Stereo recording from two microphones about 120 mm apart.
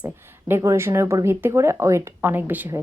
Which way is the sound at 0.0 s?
20° right (ahead or behind).